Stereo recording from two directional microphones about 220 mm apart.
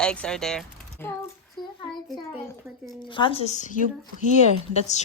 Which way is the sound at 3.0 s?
20° left (ahead or behind).